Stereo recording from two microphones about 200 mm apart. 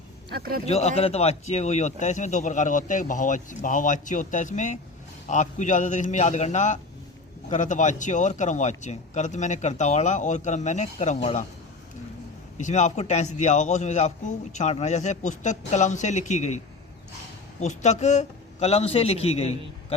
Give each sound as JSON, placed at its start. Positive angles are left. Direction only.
{"t": 0.3, "sound": "speech", "side_deg": -50}
{"t": 0.6, "sound": "speech", "side_deg": 30}
{"t": 12.5, "sound": "speech", "side_deg": 35}
{"t": 17.6, "sound": "speech", "side_deg": 35}